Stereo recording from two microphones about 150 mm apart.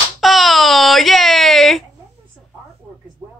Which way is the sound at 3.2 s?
20° right (ahead or behind).